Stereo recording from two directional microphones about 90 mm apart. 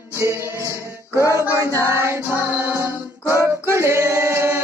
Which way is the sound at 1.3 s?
25° right (ahead or behind).